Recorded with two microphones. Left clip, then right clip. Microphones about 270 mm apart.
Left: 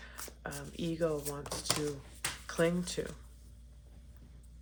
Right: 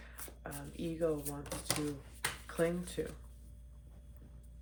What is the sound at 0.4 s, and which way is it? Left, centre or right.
Speech, left.